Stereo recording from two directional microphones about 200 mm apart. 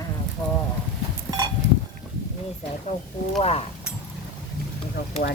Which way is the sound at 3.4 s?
30° left (ahead or behind).